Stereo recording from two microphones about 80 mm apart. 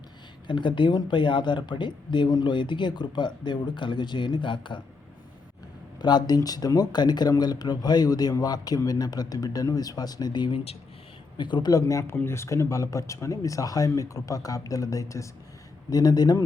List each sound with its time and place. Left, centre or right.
0.4 s speech: left
6.0 s speech: left
11.7 s speech: left
15.9 s speech: left